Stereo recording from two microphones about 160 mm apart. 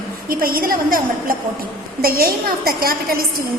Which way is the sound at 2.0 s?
65° right (ahead or behind).